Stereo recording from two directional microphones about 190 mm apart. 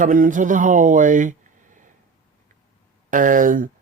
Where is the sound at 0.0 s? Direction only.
45° right (ahead or behind).